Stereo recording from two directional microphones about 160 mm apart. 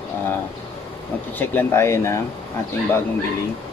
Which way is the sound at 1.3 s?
15° left (ahead or behind).